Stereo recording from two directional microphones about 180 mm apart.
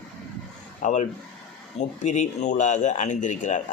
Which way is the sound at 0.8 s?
40° left (ahead or behind).